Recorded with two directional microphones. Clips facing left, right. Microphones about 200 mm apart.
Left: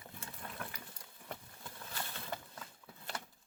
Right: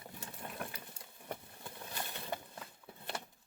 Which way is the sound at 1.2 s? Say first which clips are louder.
Right 3 dB; 20° right (ahead or behind).